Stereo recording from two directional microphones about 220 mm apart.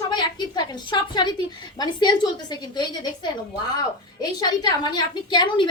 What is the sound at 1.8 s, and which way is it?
A woman's voice, 20° left (ahead or behind).